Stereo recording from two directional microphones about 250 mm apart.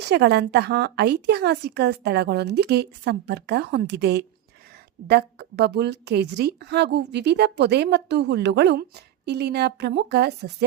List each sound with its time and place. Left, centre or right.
0.0 s a woman's voice: right